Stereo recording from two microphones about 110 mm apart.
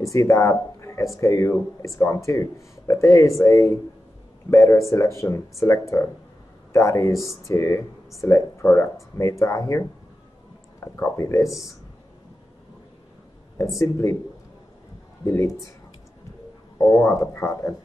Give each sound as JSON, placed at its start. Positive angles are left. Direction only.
{"t": 0.0, "sound": "speech", "side_deg": 30}
{"t": 13.7, "sound": "speech", "side_deg": 25}
{"t": 15.2, "sound": "speech", "side_deg": 25}
{"t": 16.7, "sound": "speech", "side_deg": 25}